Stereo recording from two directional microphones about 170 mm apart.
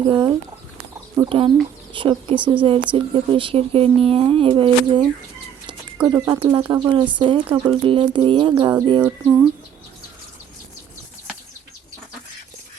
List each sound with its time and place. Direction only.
0.1 s speech: 25° right (ahead or behind)
6.1 s speech: 20° right (ahead or behind)